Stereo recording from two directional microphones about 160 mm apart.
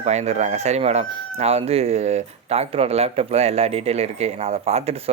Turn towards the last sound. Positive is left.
turn(degrees=-40)  # may be behind; listen again after turning